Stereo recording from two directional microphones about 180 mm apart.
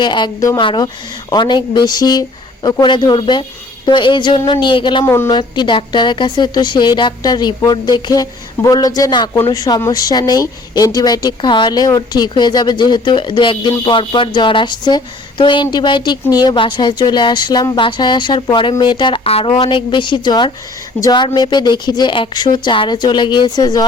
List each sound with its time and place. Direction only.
0.0 s speech: 25° left (ahead or behind)
5.0 s a woman's voice: 15° left (ahead or behind)
5.3 s speech: 25° left (ahead or behind)